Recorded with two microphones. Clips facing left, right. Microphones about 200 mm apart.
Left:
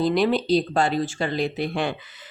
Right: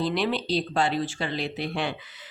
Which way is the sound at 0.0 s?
45° left (ahead or behind).